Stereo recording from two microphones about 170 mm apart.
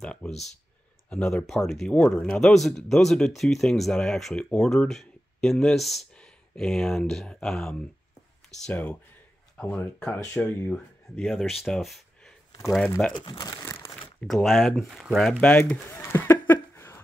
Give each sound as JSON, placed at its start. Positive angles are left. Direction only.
{"t": 0.0, "sound": "speech", "side_deg": 5}
{"t": 0.3, "sound": "speech", "side_deg": 40}
{"t": 1.1, "sound": "speech", "side_deg": 5}
{"t": 11.1, "sound": "speech", "side_deg": 0}
{"t": 13.1, "sound": "speech", "side_deg": 25}
{"t": 14.2, "sound": "speech", "side_deg": 0}